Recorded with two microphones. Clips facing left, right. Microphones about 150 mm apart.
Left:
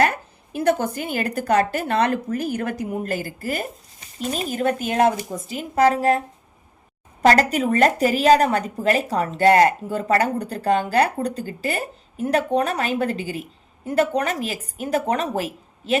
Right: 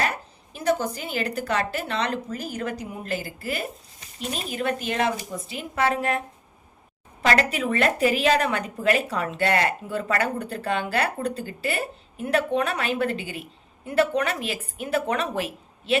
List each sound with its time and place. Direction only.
0.0 s a woman's voice: 55° left (ahead or behind)